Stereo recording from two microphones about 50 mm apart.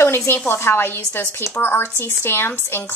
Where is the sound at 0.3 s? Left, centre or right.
Left.